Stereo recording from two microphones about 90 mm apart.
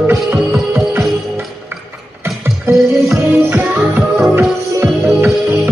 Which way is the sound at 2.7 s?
25° right (ahead or behind).